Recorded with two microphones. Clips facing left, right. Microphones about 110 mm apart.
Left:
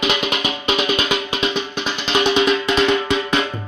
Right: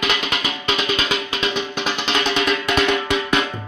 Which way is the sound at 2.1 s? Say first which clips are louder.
Left 6 dB; 5° left (ahead or behind).